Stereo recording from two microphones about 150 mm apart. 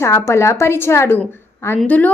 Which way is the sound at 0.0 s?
20° left (ahead or behind).